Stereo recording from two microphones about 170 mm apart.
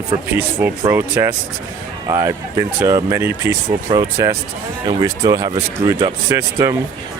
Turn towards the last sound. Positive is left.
turn(degrees=-15)  # may be behind; listen again after turning